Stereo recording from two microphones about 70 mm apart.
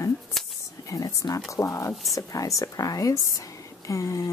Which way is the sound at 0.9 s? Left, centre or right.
Left.